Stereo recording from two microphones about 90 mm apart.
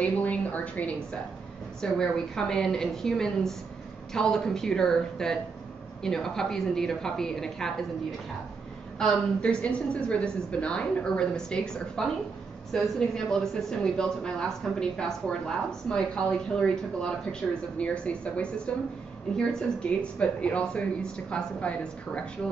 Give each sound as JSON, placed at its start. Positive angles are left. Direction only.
{"t": 0.0, "sound": "a sound", "side_deg": 15}
{"t": 1.8, "sound": "a woman's voice", "side_deg": 5}
{"t": 8.9, "sound": "a woman's voice", "side_deg": 0}
{"t": 9.4, "sound": "speech", "side_deg": 15}